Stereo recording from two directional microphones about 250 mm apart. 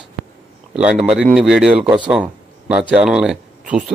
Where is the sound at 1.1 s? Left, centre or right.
Centre.